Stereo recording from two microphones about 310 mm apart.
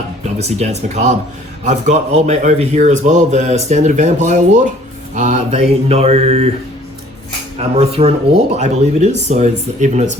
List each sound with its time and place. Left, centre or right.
0.3 s a man's voice: right
7.6 s a man's voice: centre